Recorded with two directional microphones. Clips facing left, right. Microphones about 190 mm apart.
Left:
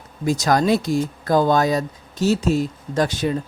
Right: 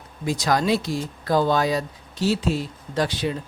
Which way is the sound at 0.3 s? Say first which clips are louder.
Left 4 dB; 45° left (ahead or behind).